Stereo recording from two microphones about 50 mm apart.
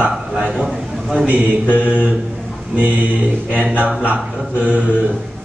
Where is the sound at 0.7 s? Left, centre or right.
Centre.